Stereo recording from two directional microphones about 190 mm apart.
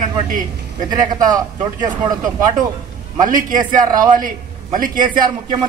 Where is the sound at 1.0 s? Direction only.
20° right (ahead or behind).